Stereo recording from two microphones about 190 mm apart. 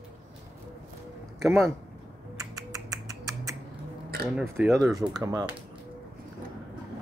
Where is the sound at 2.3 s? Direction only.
20° right (ahead or behind).